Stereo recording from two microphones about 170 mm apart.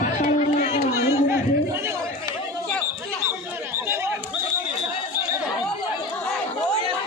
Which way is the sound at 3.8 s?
15° right (ahead or behind).